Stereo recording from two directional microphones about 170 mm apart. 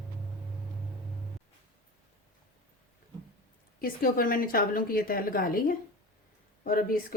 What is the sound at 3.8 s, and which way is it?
Speech, 60° left (ahead or behind).